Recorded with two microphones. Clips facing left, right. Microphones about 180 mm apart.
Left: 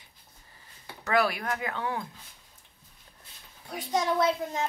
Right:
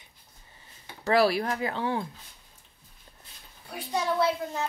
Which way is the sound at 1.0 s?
30° right (ahead or behind).